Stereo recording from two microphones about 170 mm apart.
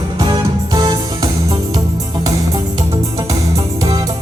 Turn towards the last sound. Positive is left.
turn(degrees=-20)  # may be behind; listen again after turning